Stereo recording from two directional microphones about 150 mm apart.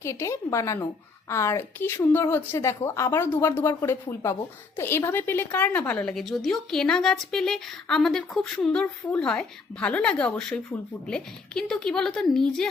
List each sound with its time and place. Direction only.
0.0 s a woman's voice: 20° left (ahead or behind)